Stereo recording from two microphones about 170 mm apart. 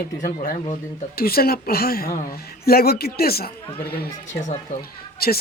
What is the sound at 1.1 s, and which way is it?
Speech, 60° left (ahead or behind).